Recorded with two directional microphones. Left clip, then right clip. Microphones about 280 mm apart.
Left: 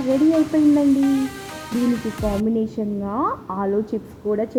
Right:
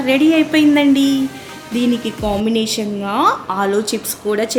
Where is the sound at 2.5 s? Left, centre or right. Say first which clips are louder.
Right 5 dB; right.